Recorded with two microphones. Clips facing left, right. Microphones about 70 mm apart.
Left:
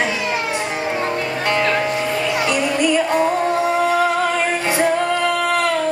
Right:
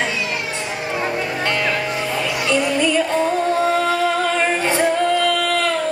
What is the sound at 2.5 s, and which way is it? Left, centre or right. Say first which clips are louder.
Music: right 2 dB; centre.